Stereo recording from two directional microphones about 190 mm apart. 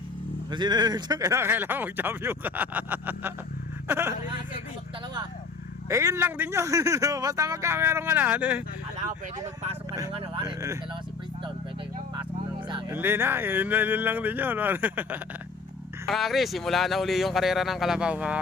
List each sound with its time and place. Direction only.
0.5 s speech: 25° right (ahead or behind)
5.9 s speech: 15° right (ahead or behind)
10.1 s speech: 30° right (ahead or behind)
12.9 s speech: 10° right (ahead or behind)